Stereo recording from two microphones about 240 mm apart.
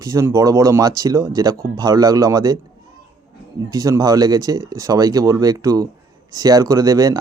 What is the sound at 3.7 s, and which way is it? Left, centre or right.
A man's voice, centre.